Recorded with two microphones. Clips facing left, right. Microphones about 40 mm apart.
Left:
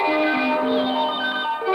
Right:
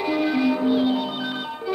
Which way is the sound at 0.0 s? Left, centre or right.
Left.